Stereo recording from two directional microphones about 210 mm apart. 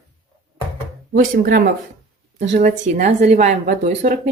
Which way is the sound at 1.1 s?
45° right (ahead or behind).